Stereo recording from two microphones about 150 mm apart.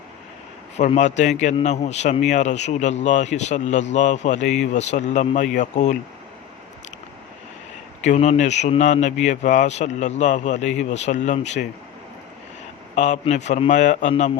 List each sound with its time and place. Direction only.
0.8 s speech: 50° left (ahead or behind)
8.0 s speech: 50° left (ahead or behind)
13.0 s speech: 50° left (ahead or behind)